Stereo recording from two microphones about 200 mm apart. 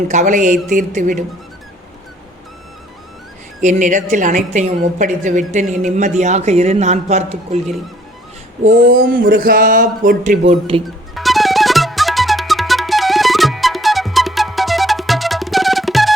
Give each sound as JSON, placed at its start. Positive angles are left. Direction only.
{"t": 0.1, "sound": "a woman's voice", "side_deg": -35}
{"t": 3.6, "sound": "a woman's voice", "side_deg": -40}
{"t": 8.6, "sound": "speech", "side_deg": -45}
{"t": 10.8, "sound": "music", "side_deg": 0}